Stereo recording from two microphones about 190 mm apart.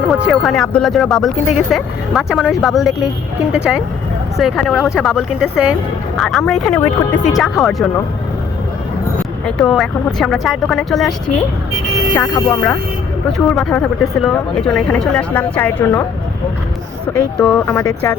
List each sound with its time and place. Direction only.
0.1 s speech: centre (ahead or behind)
9.6 s speech: centre (ahead or behind)
12.1 s a woman's voice: 15° left (ahead or behind)
17.1 s a woman's voice: 10° left (ahead or behind)